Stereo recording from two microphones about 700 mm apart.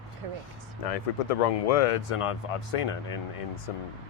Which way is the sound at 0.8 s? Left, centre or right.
Left.